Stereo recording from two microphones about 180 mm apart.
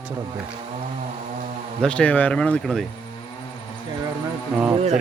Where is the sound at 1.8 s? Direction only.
5° left (ahead or behind).